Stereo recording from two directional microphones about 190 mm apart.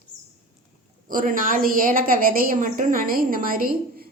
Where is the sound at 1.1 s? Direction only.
45° right (ahead or behind).